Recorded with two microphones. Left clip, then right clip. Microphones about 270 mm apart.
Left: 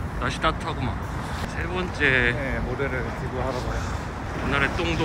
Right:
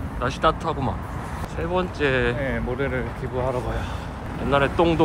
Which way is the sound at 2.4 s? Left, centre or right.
Right.